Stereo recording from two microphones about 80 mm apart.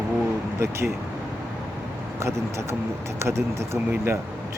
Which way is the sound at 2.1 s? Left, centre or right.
Right.